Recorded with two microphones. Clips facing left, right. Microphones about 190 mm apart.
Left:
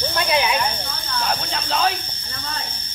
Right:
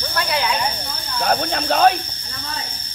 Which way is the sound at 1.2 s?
50° right (ahead or behind).